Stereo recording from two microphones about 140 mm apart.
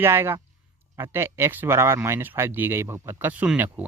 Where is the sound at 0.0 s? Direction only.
15° right (ahead or behind).